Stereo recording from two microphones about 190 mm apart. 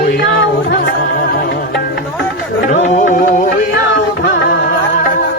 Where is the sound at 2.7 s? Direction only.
40° left (ahead or behind).